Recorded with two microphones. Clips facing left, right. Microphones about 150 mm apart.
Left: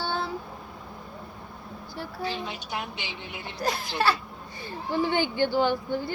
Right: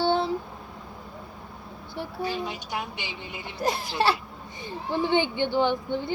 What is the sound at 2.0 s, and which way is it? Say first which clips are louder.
A woman's voice: right 3 dB; 15° right (ahead or behind).